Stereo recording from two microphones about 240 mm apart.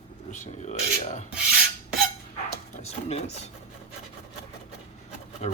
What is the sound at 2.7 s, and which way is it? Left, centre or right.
Dog, left.